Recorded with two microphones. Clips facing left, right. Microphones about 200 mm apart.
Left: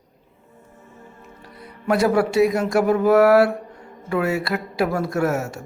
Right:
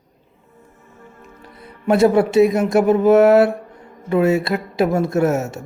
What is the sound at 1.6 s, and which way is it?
Mantra, 25° right (ahead or behind).